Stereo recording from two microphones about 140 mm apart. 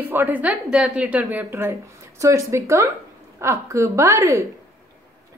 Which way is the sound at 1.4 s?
20° right (ahead or behind).